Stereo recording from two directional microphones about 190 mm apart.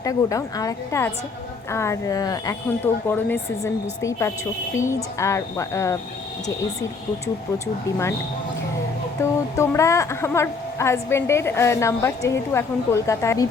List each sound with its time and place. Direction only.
0.0 s a woman's voice: 15° left (ahead or behind)
9.2 s a woman's voice: 15° left (ahead or behind)